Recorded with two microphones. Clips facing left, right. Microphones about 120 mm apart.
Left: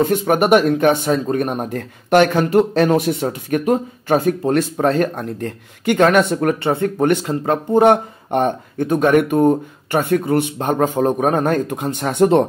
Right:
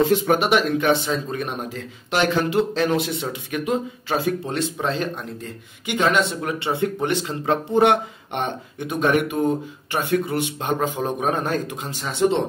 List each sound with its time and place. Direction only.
0.0 s speech: 50° left (ahead or behind)